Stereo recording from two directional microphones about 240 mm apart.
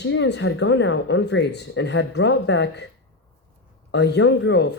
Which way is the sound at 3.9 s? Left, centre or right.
Left.